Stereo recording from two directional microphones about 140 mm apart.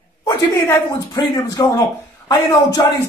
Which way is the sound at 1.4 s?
25° left (ahead or behind).